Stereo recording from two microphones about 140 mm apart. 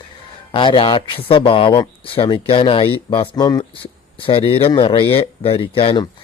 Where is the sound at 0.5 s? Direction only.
35° left (ahead or behind).